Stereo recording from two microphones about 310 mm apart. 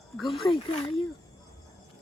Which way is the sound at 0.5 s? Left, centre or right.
Centre.